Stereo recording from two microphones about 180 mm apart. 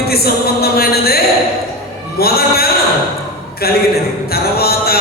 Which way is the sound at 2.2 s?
60° left (ahead or behind).